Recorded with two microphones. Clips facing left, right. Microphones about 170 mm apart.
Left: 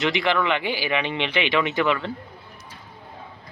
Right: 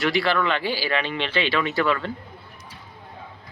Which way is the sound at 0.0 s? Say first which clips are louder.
Even; 20° left (ahead or behind).